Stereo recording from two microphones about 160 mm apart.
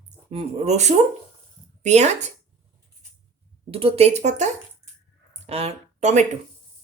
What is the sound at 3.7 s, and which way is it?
Speech, 35° right (ahead or behind).